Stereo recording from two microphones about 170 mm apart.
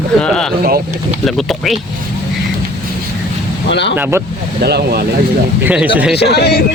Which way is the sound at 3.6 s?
90° left.